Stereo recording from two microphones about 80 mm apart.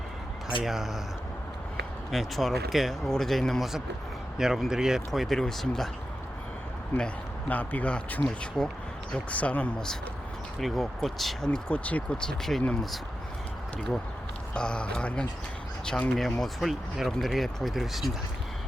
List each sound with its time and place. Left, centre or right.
0.6 s speech: centre
2.0 s speech: centre
6.9 s speech: centre
8.2 s speech: centre
9.1 s speech: centre
14.5 s speech: centre
16.4 s speech: centre